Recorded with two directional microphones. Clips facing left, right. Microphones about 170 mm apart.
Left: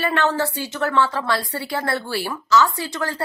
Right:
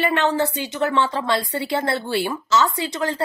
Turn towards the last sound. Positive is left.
turn(degrees=-20)  # may be behind; listen again after turning